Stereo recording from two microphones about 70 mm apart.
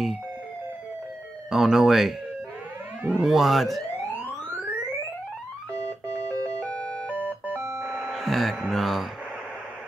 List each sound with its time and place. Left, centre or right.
1.5 s speech: centre
3.2 s speech: centre
4.1 s a sound: right
6.2 s music: right
6.6 s music: centre
7.2 s music: right
8.0 s music: centre